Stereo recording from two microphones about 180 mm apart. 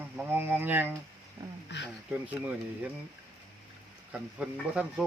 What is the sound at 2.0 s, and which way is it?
Speech, 10° right (ahead or behind).